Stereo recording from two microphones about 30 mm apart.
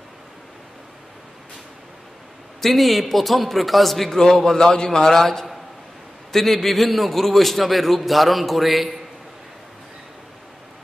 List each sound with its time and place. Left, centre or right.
2.6 s a man's voice: centre
4.1 s a man's voice: centre